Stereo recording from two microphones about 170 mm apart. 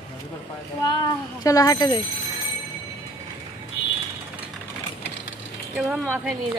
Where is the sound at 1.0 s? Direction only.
20° left (ahead or behind).